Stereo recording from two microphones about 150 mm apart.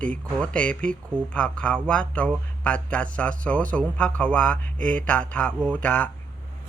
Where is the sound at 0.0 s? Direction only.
10° left (ahead or behind).